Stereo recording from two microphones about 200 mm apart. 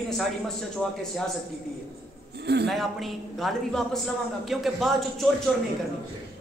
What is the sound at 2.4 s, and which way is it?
Speech, 55° right (ahead or behind).